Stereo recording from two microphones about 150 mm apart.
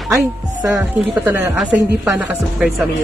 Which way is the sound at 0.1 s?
15° right (ahead or behind).